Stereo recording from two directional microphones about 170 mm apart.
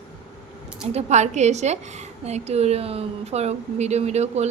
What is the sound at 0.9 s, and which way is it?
A woman's voice, 40° right (ahead or behind).